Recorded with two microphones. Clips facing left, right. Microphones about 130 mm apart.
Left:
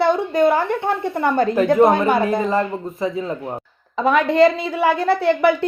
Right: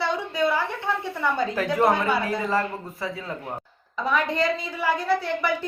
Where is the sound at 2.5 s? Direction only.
20° left (ahead or behind).